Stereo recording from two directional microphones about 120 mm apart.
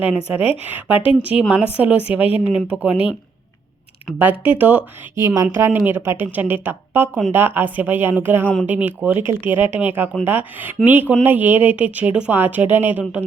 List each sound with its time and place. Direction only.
0.3 s speech: 15° right (ahead or behind)
4.2 s speech: 15° right (ahead or behind)